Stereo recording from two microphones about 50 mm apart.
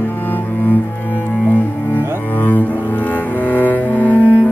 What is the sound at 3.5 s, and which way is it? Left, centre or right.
Cello, left.